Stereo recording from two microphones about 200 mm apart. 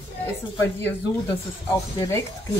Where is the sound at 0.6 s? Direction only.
10° left (ahead or behind).